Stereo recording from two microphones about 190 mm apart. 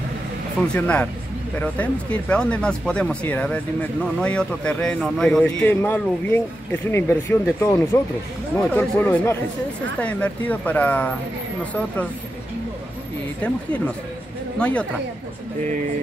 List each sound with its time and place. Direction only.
0.7 s speech: 5° left (ahead or behind)
13.4 s speech: 5° left (ahead or behind)